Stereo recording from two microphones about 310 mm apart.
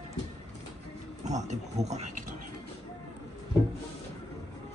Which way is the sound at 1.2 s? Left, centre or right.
Right.